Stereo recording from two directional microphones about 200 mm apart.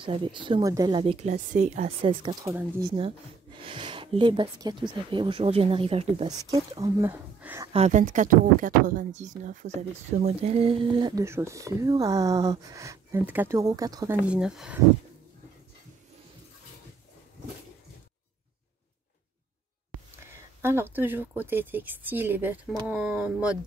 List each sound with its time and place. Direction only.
0.0 s speech: 25° right (ahead or behind)
1.3 s speech: 40° right (ahead or behind)
2.4 s speech: 15° right (ahead or behind)
6.8 s speech: 10° right (ahead or behind)
7.7 s speech: 35° right (ahead or behind); by 14.1 s 15° right (ahead or behind)
14.3 s speech: 5° right (ahead or behind)
20.2 s speech: 10° right (ahead or behind)